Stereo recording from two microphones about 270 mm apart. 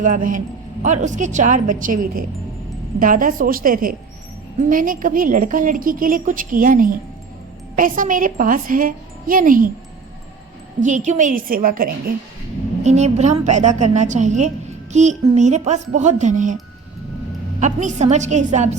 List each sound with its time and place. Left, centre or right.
0.3 s a woman's voice: right
3.0 s speech: right
10.8 s a woman's voice: right
17.6 s a woman's voice: right